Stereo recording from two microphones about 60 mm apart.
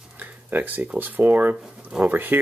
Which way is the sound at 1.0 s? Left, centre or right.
Right.